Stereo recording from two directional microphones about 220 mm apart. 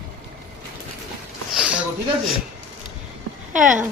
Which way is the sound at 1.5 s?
5° right (ahead or behind).